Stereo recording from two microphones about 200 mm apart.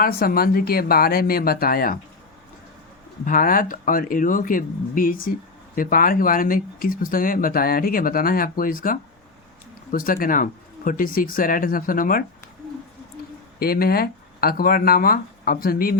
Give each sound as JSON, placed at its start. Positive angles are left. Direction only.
{"t": 0.0, "sound": "speech", "side_deg": 50}
{"t": 3.2, "sound": "speech", "side_deg": 45}
{"t": 13.6, "sound": "speech", "side_deg": 50}